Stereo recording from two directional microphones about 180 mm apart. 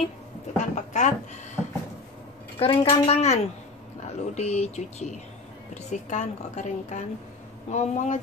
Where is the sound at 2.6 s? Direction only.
30° left (ahead or behind).